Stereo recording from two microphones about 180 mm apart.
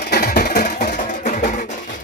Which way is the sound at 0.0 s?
60° left (ahead or behind).